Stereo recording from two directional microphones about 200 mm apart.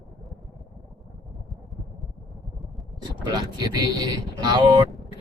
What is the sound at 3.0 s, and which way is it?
Speech, 20° right (ahead or behind).